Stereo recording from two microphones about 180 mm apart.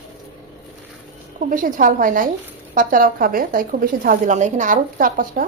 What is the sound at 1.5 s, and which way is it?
A woman's voice, 50° right (ahead or behind).